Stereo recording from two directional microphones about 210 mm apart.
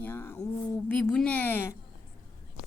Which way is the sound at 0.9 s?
5° left (ahead or behind).